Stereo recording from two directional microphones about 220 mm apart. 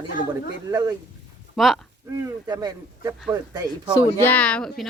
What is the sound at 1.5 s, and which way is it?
Speech, centre (ahead or behind).